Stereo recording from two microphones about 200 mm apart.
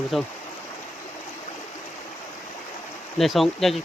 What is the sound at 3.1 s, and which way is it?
Speech, centre (ahead or behind).